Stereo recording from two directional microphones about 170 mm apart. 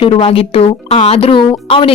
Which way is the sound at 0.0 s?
35° left (ahead or behind).